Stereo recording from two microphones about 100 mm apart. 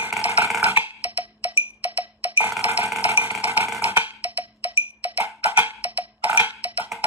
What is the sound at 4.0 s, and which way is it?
Wood block, 15° right (ahead or behind).